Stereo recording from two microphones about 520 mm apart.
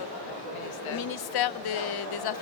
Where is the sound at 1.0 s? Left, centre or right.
Left.